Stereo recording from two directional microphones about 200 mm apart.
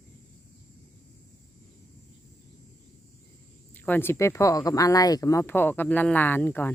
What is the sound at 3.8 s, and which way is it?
Speech, 10° left (ahead or behind).